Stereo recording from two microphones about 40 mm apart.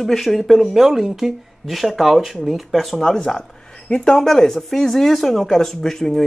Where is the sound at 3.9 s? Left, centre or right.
Centre.